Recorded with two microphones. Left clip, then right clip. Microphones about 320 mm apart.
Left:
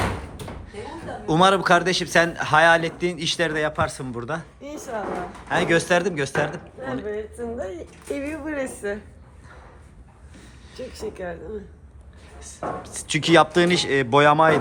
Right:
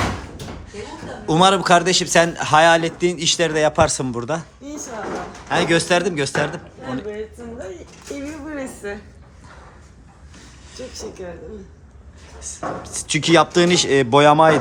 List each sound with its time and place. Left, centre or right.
0.7 s a man's voice: centre
5.5 s a man's voice: centre
8.4 s a woman's voice: left
12.4 s a man's voice: centre